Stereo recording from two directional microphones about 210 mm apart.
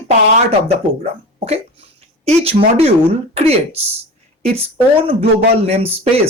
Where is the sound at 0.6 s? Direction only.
30° right (ahead or behind).